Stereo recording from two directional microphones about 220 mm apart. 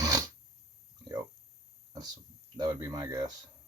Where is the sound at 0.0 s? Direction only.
15° right (ahead or behind).